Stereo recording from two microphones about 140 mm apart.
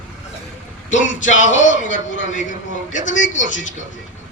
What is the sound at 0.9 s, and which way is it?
Speech, 60° left (ahead or behind).